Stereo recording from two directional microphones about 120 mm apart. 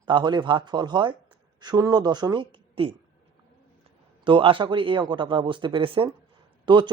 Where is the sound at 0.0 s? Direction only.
40° right (ahead or behind).